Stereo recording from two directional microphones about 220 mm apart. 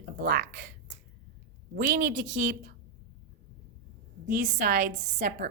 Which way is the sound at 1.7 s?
40° right (ahead or behind).